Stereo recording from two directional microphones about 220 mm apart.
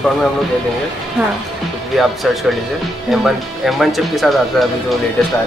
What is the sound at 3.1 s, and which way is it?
Speech, centre (ahead or behind).